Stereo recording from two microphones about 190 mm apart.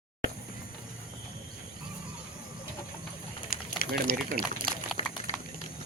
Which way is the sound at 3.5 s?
50° left (ahead or behind).